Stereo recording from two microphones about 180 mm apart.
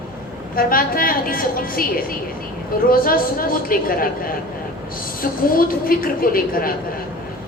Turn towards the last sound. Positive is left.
turn(degrees=55)  # may be behind; listen again after turning